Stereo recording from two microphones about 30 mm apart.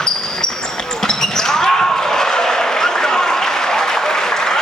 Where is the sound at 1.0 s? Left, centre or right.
Centre.